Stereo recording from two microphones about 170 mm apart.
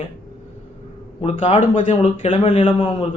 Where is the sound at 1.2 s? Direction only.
35° left (ahead or behind).